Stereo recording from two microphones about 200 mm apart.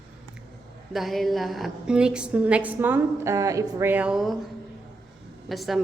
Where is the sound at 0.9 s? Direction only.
Centre (ahead or behind).